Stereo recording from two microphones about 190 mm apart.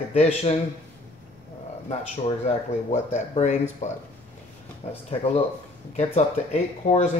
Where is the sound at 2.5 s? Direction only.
35° left (ahead or behind).